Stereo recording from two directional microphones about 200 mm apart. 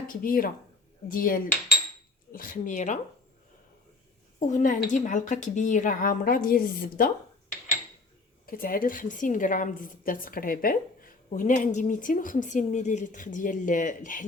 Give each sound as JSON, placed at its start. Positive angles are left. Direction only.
{"t": 0.1, "sound": "a woman's voice", "side_deg": 45}
{"t": 4.4, "sound": "a woman's voice", "side_deg": 40}
{"t": 8.4, "sound": "a woman's voice", "side_deg": 45}